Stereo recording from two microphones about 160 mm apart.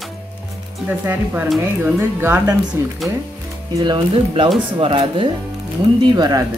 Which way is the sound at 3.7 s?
30° right (ahead or behind).